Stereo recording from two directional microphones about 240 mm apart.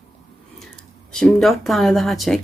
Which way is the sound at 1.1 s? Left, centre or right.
Centre.